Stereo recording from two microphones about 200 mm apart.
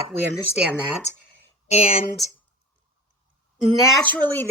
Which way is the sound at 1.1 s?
35° left (ahead or behind).